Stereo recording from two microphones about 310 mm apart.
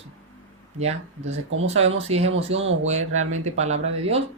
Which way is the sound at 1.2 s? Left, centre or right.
Right.